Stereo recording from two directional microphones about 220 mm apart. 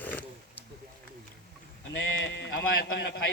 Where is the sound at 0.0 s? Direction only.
10° left (ahead or behind).